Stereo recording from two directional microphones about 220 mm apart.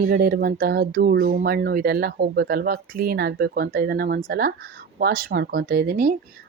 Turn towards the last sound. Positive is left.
turn(degrees=-45)  # may be behind; listen again after turning